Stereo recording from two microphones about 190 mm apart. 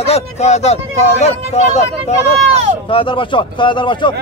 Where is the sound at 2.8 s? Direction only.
25° left (ahead or behind).